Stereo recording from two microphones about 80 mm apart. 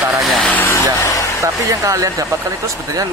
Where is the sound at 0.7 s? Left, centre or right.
Left.